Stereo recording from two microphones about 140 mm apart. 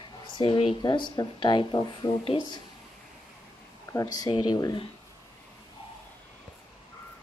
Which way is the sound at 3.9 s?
25° left (ahead or behind).